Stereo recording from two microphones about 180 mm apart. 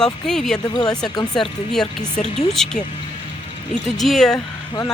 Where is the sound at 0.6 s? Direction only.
20° left (ahead or behind).